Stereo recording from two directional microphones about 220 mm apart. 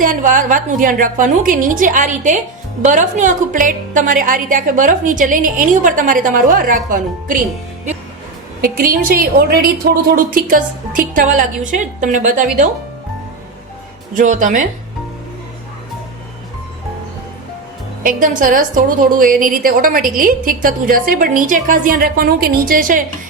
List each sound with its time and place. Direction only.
0.0 s a woman's voice: 35° right (ahead or behind)
8.6 s a woman's voice: 40° right (ahead or behind)
14.2 s a woman's voice: 35° right (ahead or behind)
18.0 s a woman's voice: 40° right (ahead or behind)